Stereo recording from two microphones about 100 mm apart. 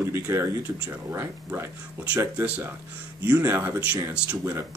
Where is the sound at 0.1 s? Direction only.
25° right (ahead or behind).